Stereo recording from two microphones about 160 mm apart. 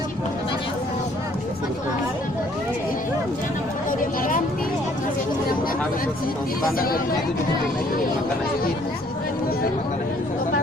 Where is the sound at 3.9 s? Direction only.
55° left (ahead or behind).